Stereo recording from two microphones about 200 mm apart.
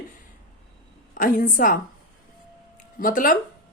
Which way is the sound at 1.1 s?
40° left (ahead or behind).